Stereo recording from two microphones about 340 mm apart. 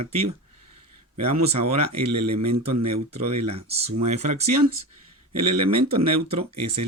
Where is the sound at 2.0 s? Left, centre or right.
Right.